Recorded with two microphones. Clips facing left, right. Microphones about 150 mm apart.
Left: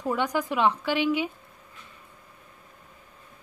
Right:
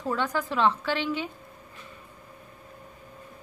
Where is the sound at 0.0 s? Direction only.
15° left (ahead or behind).